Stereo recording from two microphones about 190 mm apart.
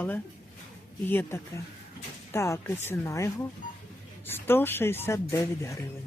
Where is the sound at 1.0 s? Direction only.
10° left (ahead or behind).